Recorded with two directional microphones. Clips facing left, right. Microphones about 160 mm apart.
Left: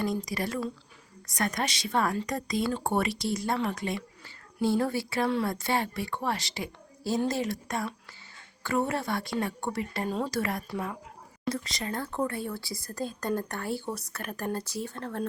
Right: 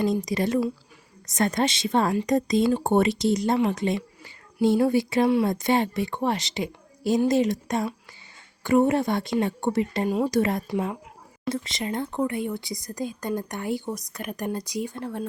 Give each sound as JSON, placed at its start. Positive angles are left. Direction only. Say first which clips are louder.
{"t": 0.0, "sound": "speech", "louder": "right 6 dB", "side_deg": -20}